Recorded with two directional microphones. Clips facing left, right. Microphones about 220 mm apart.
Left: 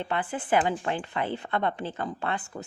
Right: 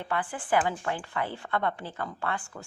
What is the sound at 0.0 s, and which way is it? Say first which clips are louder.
A woman's voice: left 2 dB; 20° left (ahead or behind).